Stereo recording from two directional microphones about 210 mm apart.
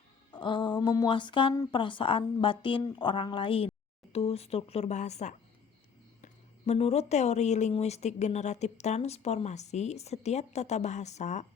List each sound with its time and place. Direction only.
0.3 s speech: 20° left (ahead or behind)